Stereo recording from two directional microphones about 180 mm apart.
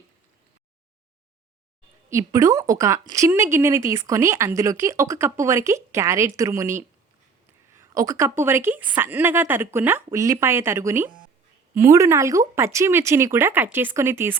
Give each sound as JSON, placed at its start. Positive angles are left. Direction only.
{"t": 2.0, "sound": "a woman's voice", "side_deg": -15}